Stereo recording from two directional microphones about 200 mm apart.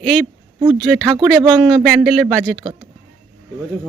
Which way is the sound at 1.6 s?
Centre (ahead or behind).